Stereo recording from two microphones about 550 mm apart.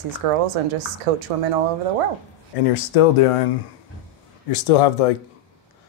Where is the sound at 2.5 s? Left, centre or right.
Left.